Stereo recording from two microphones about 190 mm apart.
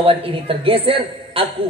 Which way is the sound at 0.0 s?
30° right (ahead or behind).